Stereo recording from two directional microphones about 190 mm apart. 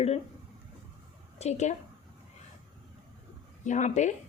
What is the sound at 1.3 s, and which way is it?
Speech, 35° left (ahead or behind).